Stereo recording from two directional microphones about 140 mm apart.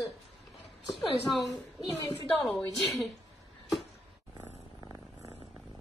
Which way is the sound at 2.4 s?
Centre (ahead or behind).